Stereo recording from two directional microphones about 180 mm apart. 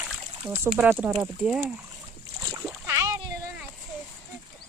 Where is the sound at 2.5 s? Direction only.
15° right (ahead or behind).